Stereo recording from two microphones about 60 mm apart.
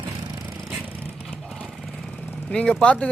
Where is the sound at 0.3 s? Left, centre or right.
Right.